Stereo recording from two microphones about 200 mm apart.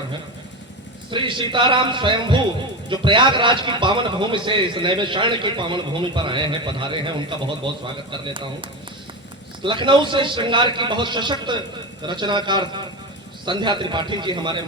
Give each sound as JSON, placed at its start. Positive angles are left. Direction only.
{"t": 1.1, "sound": "a man's voice", "side_deg": -25}
{"t": 9.8, "sound": "a man's voice", "side_deg": -25}